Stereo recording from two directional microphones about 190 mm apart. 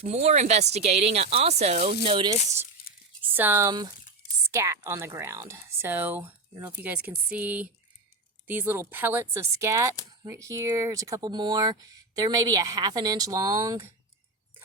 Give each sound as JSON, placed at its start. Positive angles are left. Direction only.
{"t": 0.0, "sound": "speech", "side_deg": -35}
{"t": 2.9, "sound": "a sound", "side_deg": 50}
{"t": 3.3, "sound": "speech", "side_deg": -10}